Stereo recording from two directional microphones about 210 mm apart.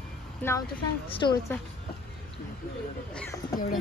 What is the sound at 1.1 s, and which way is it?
Speech, 20° left (ahead or behind).